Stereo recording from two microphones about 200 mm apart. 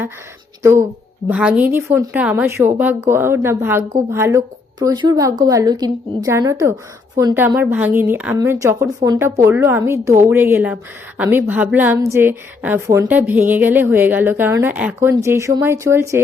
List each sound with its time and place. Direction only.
0.6 s a woman's voice: 15° right (ahead or behind)